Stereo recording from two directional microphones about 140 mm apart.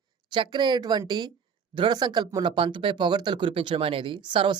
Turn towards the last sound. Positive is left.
turn(degrees=-35)  # may be behind; listen again after turning